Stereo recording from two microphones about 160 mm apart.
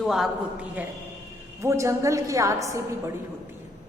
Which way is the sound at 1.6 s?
20° right (ahead or behind).